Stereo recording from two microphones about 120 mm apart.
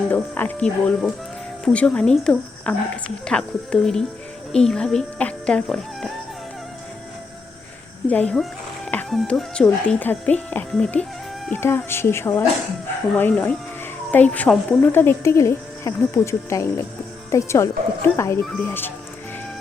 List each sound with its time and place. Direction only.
0.1 s speech: 15° left (ahead or behind)
8.1 s speech: 10° left (ahead or behind)
11.5 s speech: 20° left (ahead or behind)